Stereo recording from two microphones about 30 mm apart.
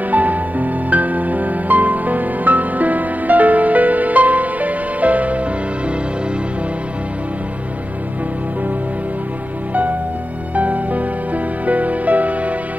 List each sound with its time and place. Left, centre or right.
0.1 s music: right
10.5 s music: right